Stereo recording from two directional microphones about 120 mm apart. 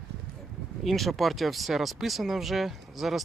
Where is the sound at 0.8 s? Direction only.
Centre (ahead or behind).